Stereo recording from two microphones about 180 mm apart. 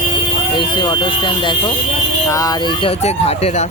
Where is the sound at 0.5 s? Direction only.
25° left (ahead or behind).